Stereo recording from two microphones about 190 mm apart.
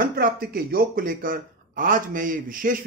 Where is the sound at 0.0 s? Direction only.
50° right (ahead or behind).